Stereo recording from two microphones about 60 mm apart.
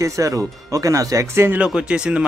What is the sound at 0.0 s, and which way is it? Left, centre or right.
Speech, right.